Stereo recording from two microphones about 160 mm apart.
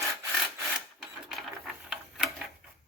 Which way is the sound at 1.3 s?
Centre (ahead or behind).